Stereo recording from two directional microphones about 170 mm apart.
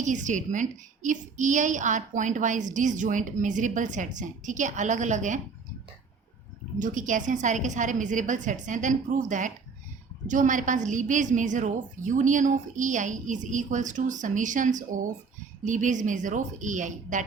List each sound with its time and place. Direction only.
0.0 s a woman's voice: 45° right (ahead or behind)
6.7 s a woman's voice: 50° right (ahead or behind)